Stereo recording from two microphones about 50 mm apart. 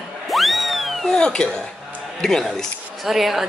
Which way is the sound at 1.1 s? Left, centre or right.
Centre.